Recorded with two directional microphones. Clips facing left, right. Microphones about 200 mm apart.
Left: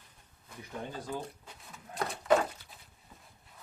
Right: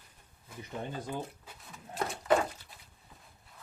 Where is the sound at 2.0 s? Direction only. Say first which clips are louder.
Left 1 dB; centre (ahead or behind).